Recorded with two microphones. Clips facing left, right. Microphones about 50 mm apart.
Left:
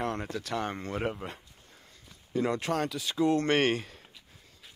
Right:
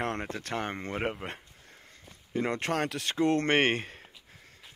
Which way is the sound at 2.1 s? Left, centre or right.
Right.